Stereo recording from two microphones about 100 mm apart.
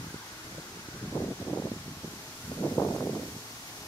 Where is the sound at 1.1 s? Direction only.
15° left (ahead or behind).